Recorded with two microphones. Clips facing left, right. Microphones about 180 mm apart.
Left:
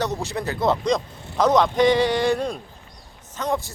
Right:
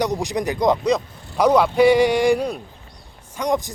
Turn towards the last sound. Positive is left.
turn(degrees=-15)  # may be behind; listen again after turning